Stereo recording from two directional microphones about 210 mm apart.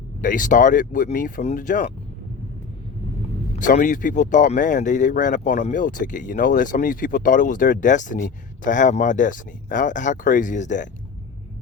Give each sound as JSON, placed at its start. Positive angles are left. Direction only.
{"t": 0.2, "sound": "speech", "side_deg": 40}
{"t": 3.5, "sound": "speech", "side_deg": 40}